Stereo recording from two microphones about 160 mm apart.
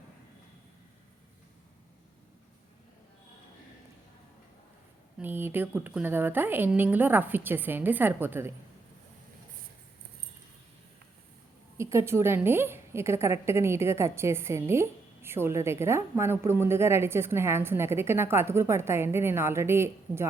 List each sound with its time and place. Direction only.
5.2 s a woman's voice: 10° right (ahead or behind)
11.8 s a woman's voice: 15° right (ahead or behind)